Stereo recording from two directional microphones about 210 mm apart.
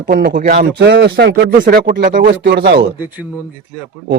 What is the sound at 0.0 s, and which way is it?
Speech, 45° right (ahead or behind).